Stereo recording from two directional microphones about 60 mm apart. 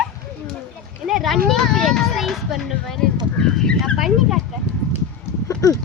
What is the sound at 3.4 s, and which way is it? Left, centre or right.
Speech, centre.